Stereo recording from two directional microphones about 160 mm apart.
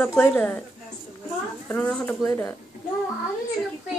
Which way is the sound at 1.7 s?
10° left (ahead or behind).